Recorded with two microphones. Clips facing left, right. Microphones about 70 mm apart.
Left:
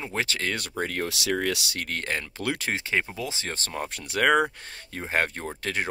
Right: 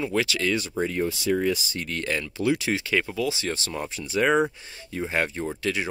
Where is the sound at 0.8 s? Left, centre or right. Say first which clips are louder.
Right 3 dB; left.